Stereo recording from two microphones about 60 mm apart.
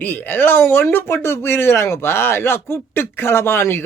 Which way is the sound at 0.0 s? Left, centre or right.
Left.